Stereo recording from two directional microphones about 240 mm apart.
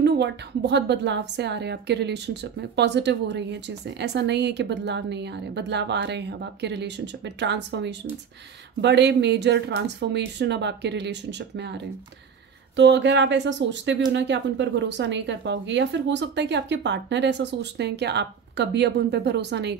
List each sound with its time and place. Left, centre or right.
0.0 s a woman's voice: right